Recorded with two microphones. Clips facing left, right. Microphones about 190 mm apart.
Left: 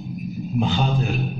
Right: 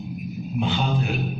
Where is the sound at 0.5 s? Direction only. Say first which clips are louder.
Left 2 dB; 40° left (ahead or behind).